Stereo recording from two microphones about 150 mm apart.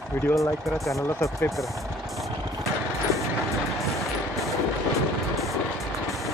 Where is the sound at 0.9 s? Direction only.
20° left (ahead or behind).